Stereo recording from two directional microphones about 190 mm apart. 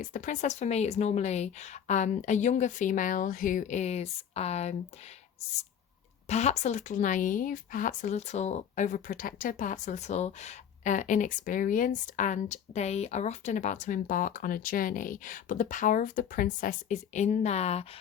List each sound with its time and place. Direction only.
0.0 s a woman's voice: 40° left (ahead or behind)
6.2 s a woman's voice: 35° left (ahead or behind)